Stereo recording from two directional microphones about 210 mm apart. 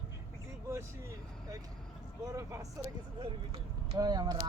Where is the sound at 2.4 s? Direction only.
15° right (ahead or behind).